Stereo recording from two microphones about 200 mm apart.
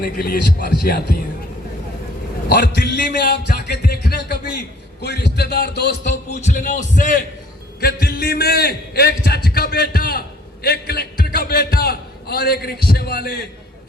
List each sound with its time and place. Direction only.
0.0 s a man's voice: 50° left (ahead or behind)
2.5 s a man's voice: 55° left (ahead or behind)
6.0 s a man's voice: 40° left (ahead or behind)
7.8 s a man's voice: 50° left (ahead or behind)